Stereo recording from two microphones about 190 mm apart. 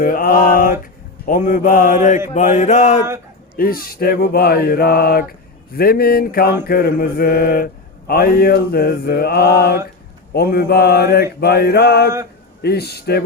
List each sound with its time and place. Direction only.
0.0 s a sound: 45° left (ahead or behind)
1.2 s mantra: 45° left (ahead or behind)
3.6 s mantra: 50° left (ahead or behind)